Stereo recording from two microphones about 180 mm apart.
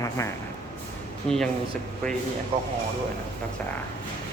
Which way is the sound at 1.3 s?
5° left (ahead or behind).